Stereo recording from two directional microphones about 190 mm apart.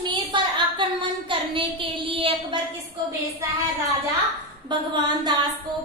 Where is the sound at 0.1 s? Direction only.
25° right (ahead or behind).